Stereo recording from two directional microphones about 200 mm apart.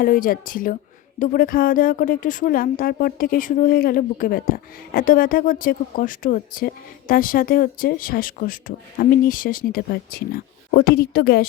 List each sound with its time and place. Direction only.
0.0 s a woman's voice: 45° left (ahead or behind)